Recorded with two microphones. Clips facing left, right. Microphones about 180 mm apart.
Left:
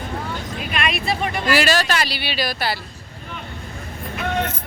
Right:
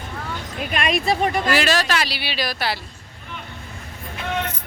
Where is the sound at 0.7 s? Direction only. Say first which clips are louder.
Right 3 dB; 45° right (ahead or behind).